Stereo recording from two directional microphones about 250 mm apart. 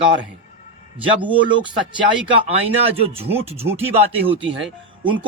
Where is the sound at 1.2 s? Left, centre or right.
Centre.